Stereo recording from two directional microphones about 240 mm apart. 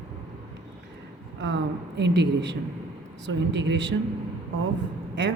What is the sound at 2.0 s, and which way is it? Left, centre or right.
Speech, right.